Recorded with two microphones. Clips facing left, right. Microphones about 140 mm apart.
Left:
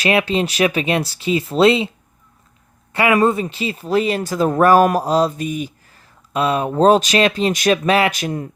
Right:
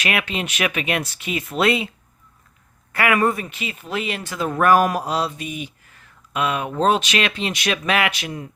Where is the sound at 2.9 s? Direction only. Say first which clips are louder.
Left 4 dB; 25° left (ahead or behind).